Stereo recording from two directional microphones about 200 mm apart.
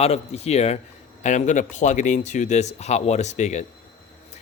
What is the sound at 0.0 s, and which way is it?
A man's voice, 30° left (ahead or behind).